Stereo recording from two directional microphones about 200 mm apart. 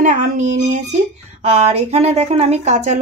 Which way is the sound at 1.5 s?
30° right (ahead or behind).